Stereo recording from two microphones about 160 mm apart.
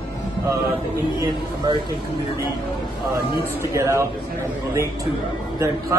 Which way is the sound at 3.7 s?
20° right (ahead or behind).